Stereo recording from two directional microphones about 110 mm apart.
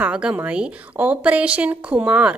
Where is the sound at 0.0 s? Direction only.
10° right (ahead or behind).